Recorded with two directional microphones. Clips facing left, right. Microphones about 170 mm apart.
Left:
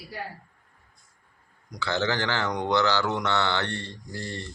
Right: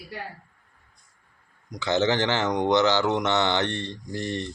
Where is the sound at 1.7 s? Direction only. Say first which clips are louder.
Right 4 dB; 20° right (ahead or behind).